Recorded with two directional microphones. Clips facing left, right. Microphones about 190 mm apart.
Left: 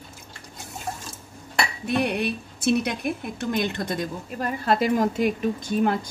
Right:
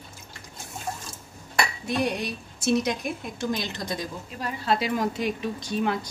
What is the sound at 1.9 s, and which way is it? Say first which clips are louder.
A woman's voice: left 5 dB; 60° left (ahead or behind).